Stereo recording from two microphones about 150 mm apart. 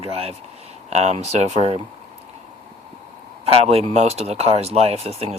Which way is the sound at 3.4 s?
40° right (ahead or behind).